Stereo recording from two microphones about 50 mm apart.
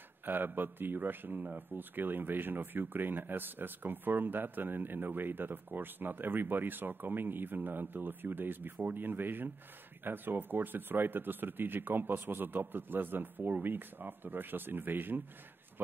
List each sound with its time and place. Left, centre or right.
0.2 s speech: right